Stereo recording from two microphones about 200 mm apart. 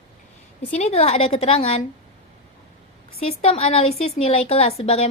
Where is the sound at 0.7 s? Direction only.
30° left (ahead or behind).